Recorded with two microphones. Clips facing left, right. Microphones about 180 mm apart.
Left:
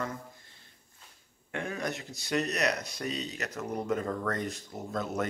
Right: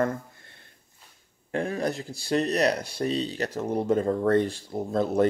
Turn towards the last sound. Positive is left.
turn(degrees=-30)  # may be behind; listen again after turning